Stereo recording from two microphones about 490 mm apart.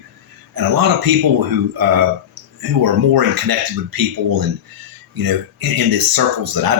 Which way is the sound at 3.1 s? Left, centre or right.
Right.